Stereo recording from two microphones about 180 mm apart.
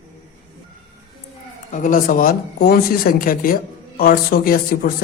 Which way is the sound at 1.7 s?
45° left (ahead or behind).